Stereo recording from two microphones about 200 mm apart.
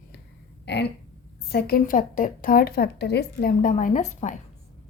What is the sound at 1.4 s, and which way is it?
A woman's voice, 50° left (ahead or behind).